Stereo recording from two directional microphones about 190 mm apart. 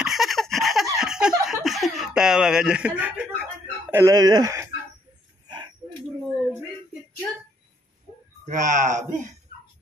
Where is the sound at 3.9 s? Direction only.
15° right (ahead or behind).